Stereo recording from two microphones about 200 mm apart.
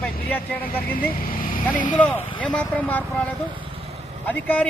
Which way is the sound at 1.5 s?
40° left (ahead or behind).